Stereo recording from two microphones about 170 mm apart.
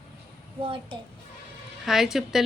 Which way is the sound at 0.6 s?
30° right (ahead or behind).